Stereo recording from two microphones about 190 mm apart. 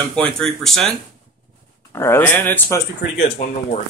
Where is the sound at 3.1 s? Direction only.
40° left (ahead or behind).